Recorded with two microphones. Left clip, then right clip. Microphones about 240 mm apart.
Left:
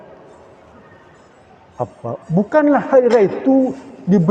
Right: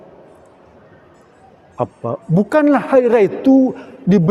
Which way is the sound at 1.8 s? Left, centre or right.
Right.